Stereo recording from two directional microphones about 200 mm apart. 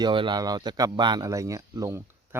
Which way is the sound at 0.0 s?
25° right (ahead or behind).